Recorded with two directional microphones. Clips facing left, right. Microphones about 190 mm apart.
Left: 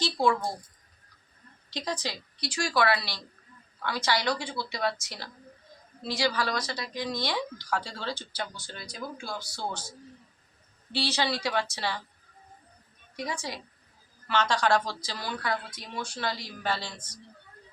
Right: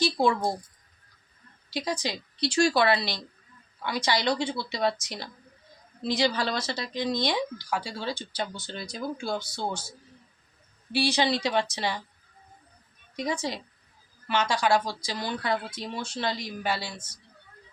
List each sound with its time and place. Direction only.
0.0 s speech: 20° right (ahead or behind)
1.7 s speech: 10° right (ahead or behind)
10.9 s speech: 15° right (ahead or behind)
13.1 s speech: 20° right (ahead or behind)
14.3 s speech: 10° right (ahead or behind)